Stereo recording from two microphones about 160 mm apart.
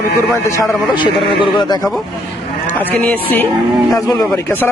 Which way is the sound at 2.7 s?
10° left (ahead or behind).